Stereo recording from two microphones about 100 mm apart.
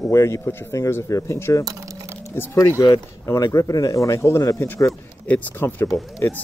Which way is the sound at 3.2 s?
30° left (ahead or behind).